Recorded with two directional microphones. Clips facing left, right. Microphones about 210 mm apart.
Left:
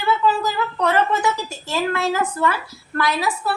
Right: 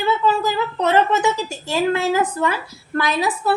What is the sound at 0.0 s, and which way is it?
A woman's voice, 20° right (ahead or behind).